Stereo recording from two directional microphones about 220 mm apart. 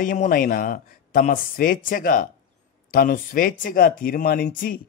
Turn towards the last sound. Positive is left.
turn(degrees=40)  # may be behind; listen again after turning